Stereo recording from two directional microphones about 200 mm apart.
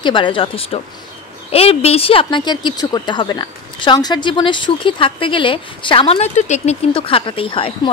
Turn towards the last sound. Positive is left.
turn(degrees=25)  # may be behind; listen again after turning